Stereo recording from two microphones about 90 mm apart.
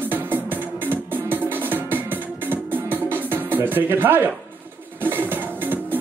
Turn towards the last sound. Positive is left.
turn(degrees=-20)  # may be behind; listen again after turning